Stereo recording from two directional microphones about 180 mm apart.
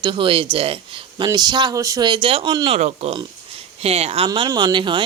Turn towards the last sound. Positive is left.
turn(degrees=-25)  # may be behind; listen again after turning